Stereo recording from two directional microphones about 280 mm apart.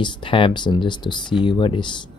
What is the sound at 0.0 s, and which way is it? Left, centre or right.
Speech, centre.